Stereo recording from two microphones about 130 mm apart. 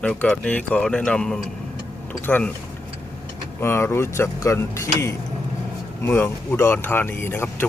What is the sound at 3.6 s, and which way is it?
Speech, 20° left (ahead or behind).